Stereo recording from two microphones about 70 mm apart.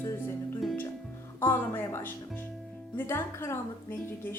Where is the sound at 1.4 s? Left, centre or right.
Left.